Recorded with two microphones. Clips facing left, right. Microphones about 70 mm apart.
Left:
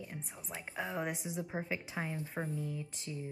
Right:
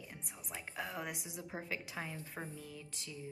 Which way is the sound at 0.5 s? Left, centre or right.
Centre.